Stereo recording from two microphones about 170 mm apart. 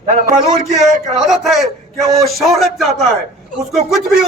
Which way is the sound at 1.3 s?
Centre (ahead or behind).